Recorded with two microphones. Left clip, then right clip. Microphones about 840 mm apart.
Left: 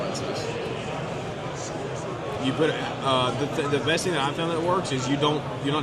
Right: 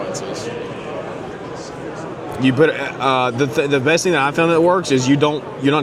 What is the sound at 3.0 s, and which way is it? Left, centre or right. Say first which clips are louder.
A man's voice: right 8 dB; right.